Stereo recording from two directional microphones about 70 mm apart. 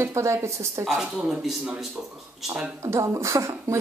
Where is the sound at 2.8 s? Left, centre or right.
Right.